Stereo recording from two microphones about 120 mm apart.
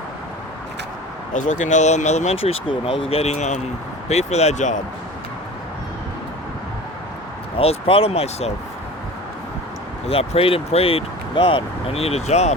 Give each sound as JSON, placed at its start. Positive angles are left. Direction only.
{"t": 1.3, "sound": "speech", "side_deg": 90}
{"t": 7.5, "sound": "speech", "side_deg": 55}
{"t": 10.1, "sound": "speech", "side_deg": 55}